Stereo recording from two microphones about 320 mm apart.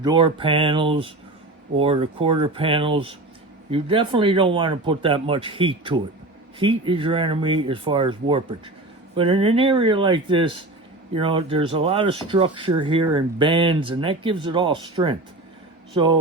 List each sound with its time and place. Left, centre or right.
0.0 s speech: centre